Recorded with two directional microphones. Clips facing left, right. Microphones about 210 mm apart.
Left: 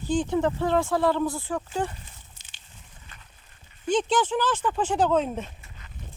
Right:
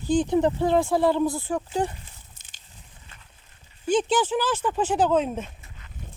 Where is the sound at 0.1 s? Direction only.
15° right (ahead or behind).